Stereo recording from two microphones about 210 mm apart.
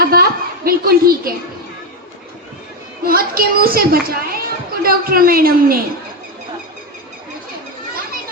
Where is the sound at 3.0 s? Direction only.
45° right (ahead or behind).